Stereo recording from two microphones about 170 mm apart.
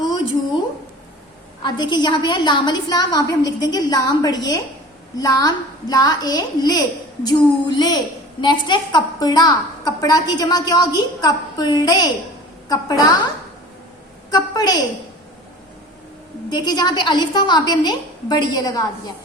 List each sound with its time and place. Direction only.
1.6 s a woman's voice: 25° left (ahead or behind)
14.3 s a woman's voice: 25° left (ahead or behind)
16.5 s a woman's voice: 25° left (ahead or behind)